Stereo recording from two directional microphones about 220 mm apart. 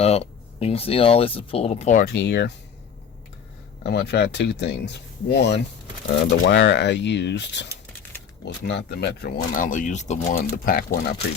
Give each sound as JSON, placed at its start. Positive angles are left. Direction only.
{"t": 0.0, "sound": "speech", "side_deg": 30}
{"t": 3.8, "sound": "speech", "side_deg": 50}